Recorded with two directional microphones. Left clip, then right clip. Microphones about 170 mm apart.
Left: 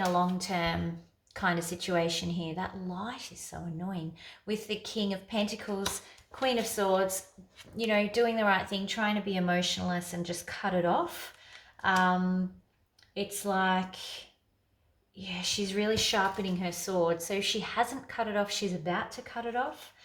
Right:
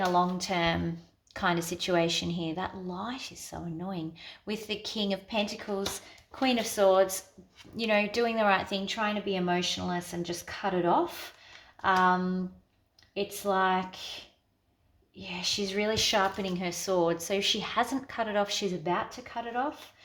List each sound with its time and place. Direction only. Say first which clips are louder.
0.3 s a woman's voice: right 3 dB; 35° right (ahead or behind)
15.2 s a woman's voice: right 2 dB; 25° right (ahead or behind)